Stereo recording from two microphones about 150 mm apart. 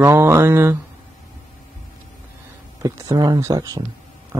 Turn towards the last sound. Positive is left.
turn(degrees=-25)  # may be behind; listen again after turning